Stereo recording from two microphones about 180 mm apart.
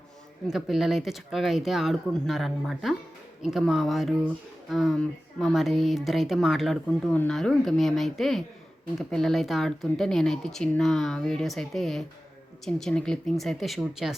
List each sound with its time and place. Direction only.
0.4 s a woman's voice: centre (ahead or behind)